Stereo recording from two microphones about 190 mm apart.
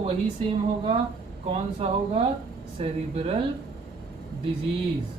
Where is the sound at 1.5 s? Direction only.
30° right (ahead or behind).